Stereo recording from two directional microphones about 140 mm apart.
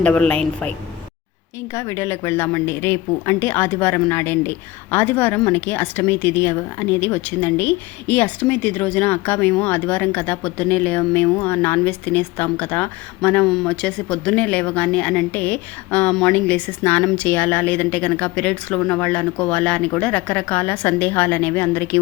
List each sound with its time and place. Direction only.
0.0 s speech: 10° left (ahead or behind)
1.7 s speech: 20° left (ahead or behind); by 17.2 s centre (ahead or behind)
17.2 s speech: 10° left (ahead or behind)